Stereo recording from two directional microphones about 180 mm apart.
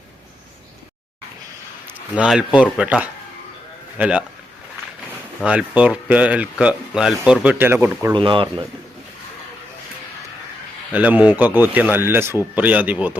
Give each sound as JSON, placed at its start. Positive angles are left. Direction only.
{"t": 1.9, "sound": "speech", "side_deg": -5}
{"t": 5.4, "sound": "speech", "side_deg": -5}
{"t": 8.1, "sound": "speech", "side_deg": -25}
{"t": 10.9, "sound": "speech", "side_deg": -10}